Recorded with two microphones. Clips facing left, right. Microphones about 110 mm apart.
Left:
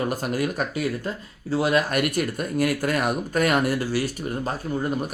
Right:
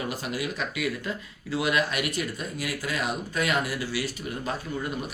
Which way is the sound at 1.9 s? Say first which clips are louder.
Left 6 dB; 50° left (ahead or behind).